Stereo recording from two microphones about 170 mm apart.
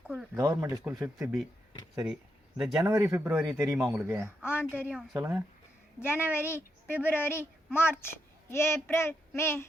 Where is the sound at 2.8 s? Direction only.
20° right (ahead or behind); by 5.2 s 5° right (ahead or behind).